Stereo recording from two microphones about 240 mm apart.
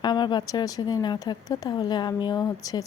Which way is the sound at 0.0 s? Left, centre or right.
Centre.